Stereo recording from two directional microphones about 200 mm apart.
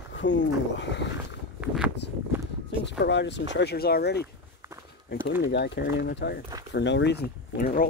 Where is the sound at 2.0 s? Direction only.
60° left (ahead or behind).